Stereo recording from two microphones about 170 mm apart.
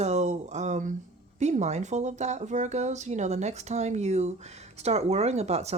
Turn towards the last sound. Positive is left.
turn(degrees=-40)  # may be behind; listen again after turning